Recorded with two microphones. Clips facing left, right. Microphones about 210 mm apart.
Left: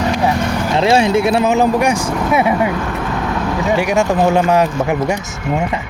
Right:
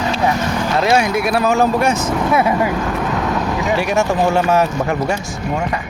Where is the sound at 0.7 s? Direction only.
25° left (ahead or behind).